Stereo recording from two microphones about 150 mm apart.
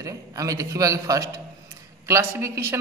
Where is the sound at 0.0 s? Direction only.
20° right (ahead or behind).